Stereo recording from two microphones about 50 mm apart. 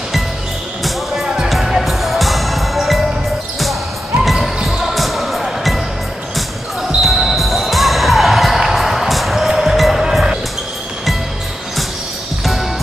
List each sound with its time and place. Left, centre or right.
1.2 s music: centre
1.5 s music: centre
4.2 s basketball bounce: centre
4.6 s music: centre
7.0 s basketball bounce: centre